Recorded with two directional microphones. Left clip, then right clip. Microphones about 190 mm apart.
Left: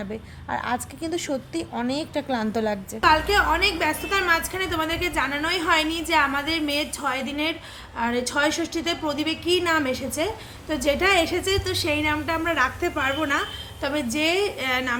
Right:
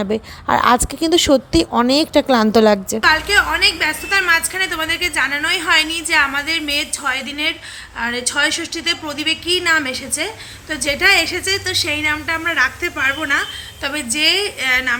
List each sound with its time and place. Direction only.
0.0 s a woman's voice: 40° right (ahead or behind)
3.0 s a woman's voice: 5° left (ahead or behind)